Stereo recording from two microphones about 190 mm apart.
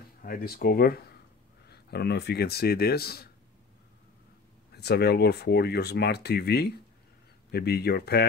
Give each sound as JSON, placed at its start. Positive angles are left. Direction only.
{"t": 0.2, "sound": "speech", "side_deg": 50}
{"t": 4.7, "sound": "speech", "side_deg": 60}